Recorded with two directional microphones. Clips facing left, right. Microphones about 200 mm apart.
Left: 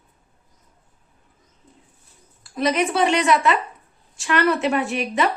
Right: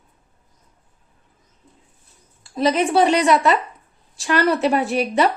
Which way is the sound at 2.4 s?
30° right (ahead or behind).